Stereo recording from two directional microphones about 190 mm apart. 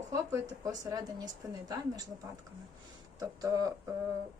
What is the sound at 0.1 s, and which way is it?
Speech, 15° right (ahead or behind).